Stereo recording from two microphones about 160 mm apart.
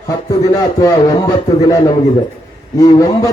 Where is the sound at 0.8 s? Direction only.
25° left (ahead or behind).